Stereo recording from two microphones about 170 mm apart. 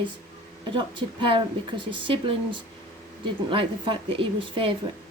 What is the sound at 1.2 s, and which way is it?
A woman's voice, 30° right (ahead or behind).